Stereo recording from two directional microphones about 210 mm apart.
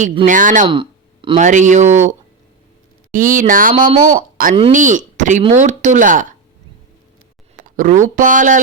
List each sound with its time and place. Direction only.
0.0 s speech: 25° right (ahead or behind)
0.3 s speech: 40° right (ahead or behind)
0.7 s a sound: 25° right (ahead or behind)
1.4 s speech: 35° right (ahead or behind)
3.1 s speech: 40° right (ahead or behind)
7.5 s speech: 40° right (ahead or behind)